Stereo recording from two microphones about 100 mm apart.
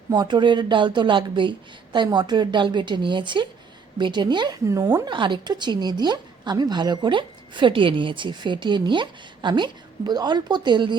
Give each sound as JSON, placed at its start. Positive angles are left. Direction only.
{"t": 0.1, "sound": "a woman's voice", "side_deg": -45}
{"t": 4.6, "sound": "a woman's voice", "side_deg": -35}
{"t": 5.0, "sound": "a woman's voice", "side_deg": -50}